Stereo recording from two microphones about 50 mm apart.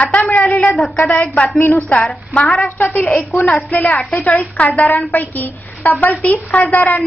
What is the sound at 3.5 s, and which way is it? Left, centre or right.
A woman's voice, left.